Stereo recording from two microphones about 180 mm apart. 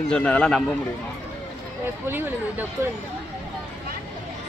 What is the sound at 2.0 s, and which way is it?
Speech, 10° right (ahead or behind).